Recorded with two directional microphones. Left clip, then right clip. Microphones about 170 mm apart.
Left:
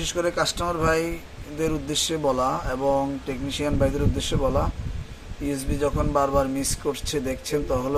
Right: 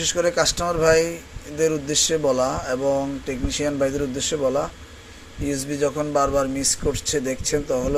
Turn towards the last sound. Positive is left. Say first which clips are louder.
# right 3 dB
turn(degrees=10)  # may be behind; listen again after turning